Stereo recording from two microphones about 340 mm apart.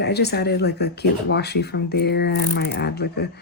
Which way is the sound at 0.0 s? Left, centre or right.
Left.